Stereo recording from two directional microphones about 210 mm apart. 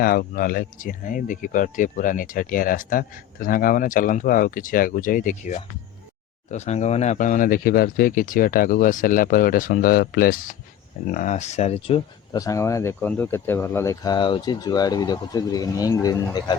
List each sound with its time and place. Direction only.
0.0 s speech: 45° left (ahead or behind); by 16.6 s 20° left (ahead or behind)